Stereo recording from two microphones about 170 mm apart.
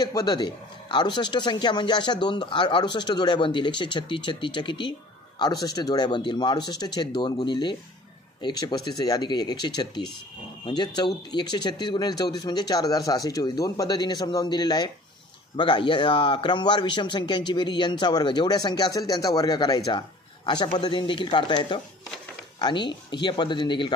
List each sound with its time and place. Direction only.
0.0 s speech: 20° left (ahead or behind)